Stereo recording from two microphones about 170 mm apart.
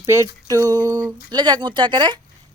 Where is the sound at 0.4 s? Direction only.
20° right (ahead or behind).